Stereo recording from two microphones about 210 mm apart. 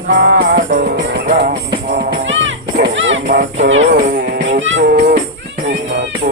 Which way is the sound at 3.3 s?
45° right (ahead or behind).